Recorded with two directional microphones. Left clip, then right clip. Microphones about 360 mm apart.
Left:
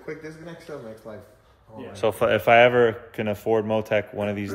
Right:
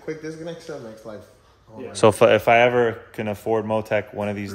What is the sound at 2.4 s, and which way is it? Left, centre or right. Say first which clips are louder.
A man's voice: even; centre.